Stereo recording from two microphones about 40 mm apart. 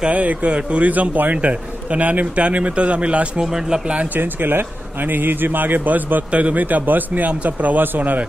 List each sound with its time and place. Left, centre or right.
0.1 s a man's voice: right
4.2 s speech: right
6.3 s a man's voice: right
6.6 s speech: right